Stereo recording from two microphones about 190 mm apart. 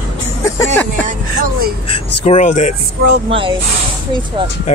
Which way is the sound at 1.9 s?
35° left (ahead or behind).